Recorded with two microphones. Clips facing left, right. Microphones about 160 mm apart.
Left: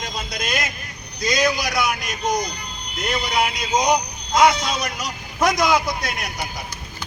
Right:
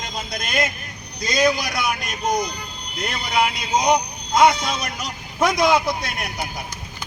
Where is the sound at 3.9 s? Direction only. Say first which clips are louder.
Right 1 dB; 25° right (ahead or behind).